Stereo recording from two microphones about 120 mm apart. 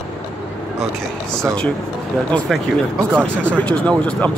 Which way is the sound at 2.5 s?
Centre (ahead or behind).